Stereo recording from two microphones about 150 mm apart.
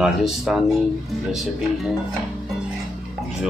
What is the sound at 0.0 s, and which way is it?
Speech, centre (ahead or behind).